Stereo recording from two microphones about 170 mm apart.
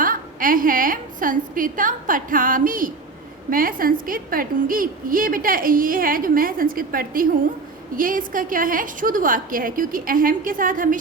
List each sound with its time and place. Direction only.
0.0 s a woman's voice: 55° right (ahead or behind)